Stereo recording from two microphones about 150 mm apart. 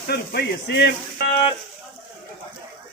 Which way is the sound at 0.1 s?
90° left.